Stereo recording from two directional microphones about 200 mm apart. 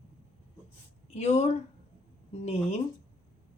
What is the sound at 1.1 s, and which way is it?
A woman's voice, 35° left (ahead or behind).